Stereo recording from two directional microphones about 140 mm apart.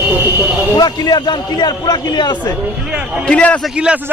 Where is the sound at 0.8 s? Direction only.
30° left (ahead or behind).